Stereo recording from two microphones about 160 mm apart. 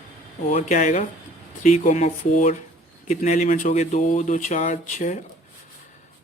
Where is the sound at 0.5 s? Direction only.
50° left (ahead or behind).